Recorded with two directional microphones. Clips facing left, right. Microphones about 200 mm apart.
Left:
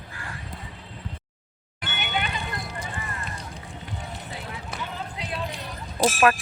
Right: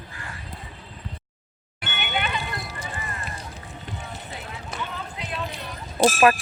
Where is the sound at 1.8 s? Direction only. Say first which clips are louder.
Right 1 dB; 35° left (ahead or behind).